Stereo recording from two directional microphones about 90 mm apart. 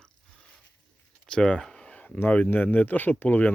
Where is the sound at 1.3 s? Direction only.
5° left (ahead or behind).